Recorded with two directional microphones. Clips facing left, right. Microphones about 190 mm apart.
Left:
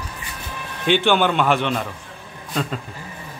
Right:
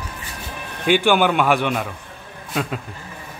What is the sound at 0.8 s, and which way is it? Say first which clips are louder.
A man's voice: right 1 dB; 10° right (ahead or behind).